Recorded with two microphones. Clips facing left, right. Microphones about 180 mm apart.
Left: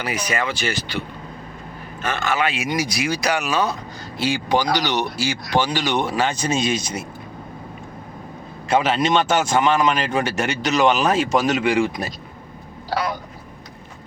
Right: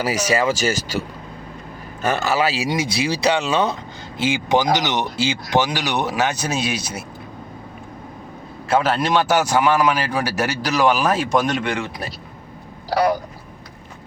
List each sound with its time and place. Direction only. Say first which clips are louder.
0.0 s speech: right 5 dB; 40° right (ahead or behind)
2.7 s speech: right 1 dB; 25° right (ahead or behind); by 7.0 s 5° right (ahead or behind)
8.7 s speech: even; 5° right (ahead or behind)
11.3 s speech: left 1 dB; 5° left (ahead or behind)